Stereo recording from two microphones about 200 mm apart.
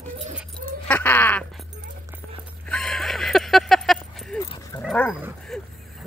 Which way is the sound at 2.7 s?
5° left (ahead or behind).